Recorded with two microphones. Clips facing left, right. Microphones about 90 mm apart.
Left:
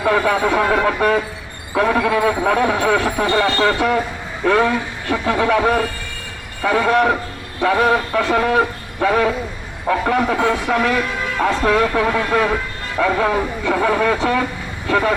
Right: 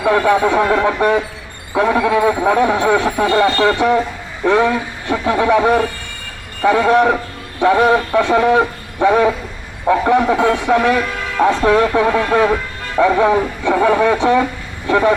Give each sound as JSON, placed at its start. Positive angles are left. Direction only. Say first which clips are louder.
{"t": 0.0, "sound": "speech", "louder": "right 3 dB", "side_deg": -5}
{"t": 3.1, "sound": "speech", "louder": "right 3 dB", "side_deg": -5}
{"t": 8.4, "sound": "a sound", "louder": "right 3 dB", "side_deg": -20}
{"t": 9.8, "sound": "speech", "louder": "right 4 dB", "side_deg": -10}
{"t": 14.2, "sound": "speech", "louder": "right 5 dB", "side_deg": -20}